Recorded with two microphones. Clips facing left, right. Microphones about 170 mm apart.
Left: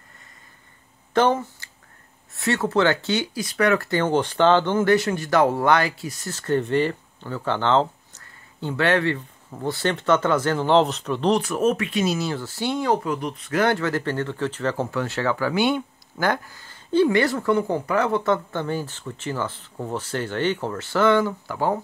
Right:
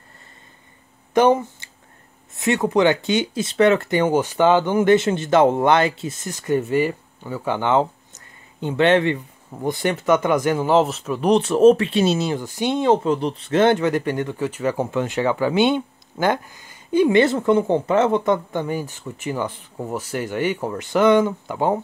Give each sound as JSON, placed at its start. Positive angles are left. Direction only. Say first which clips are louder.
{"t": 1.1, "sound": "speech", "louder": "right 4 dB", "side_deg": -15}
{"t": 11.2, "sound": "speech", "louder": "right 7 dB", "side_deg": -25}